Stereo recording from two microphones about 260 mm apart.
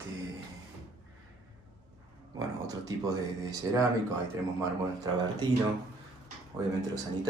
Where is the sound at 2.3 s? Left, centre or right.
Centre.